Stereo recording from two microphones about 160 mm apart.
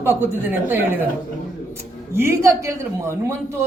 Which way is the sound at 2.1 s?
15° right (ahead or behind).